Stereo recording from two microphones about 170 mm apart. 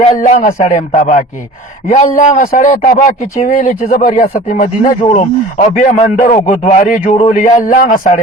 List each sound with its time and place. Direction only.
0.2 s speech: 50° left (ahead or behind)